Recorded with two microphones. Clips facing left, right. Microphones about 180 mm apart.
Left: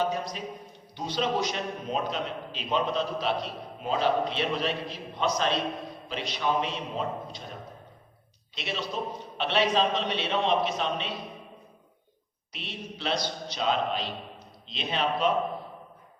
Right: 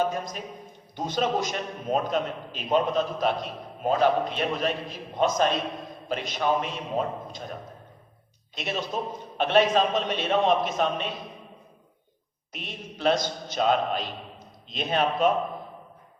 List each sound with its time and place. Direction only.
0.0 s a man's voice: 50° right (ahead or behind)
8.5 s a man's voice: 50° right (ahead or behind)
12.5 s a man's voice: 50° right (ahead or behind)